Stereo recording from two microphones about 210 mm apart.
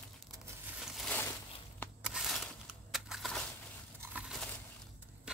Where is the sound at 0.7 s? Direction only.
Centre (ahead or behind).